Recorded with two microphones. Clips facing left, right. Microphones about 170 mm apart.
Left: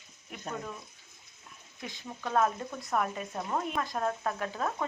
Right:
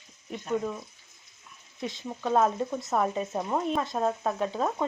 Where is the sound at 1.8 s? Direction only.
25° right (ahead or behind).